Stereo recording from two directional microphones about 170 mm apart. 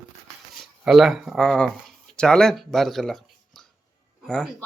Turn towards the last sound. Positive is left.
turn(degrees=5)  # may be behind; listen again after turning